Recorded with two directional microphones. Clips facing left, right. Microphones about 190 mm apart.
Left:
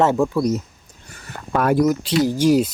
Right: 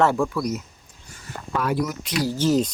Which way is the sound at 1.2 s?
55° left (ahead or behind).